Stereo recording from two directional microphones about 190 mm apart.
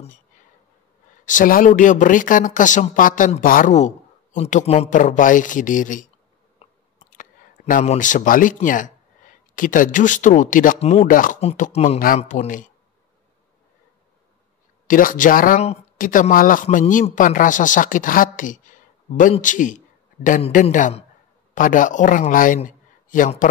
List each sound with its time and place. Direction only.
1.2 s speech: 45° left (ahead or behind)
6.6 s chewing: 45° left (ahead or behind)
7.7 s speech: 40° left (ahead or behind)
14.9 s a man's voice: 45° left (ahead or behind)